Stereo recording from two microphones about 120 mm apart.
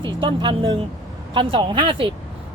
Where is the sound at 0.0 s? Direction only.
40° right (ahead or behind).